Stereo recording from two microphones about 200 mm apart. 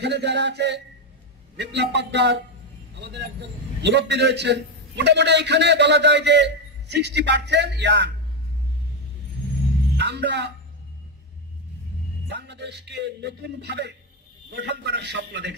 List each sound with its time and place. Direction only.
0.0 s a man's voice: 60° right (ahead or behind)
9.9 s a man's voice: 60° right (ahead or behind)
12.3 s a man's voice: 60° right (ahead or behind)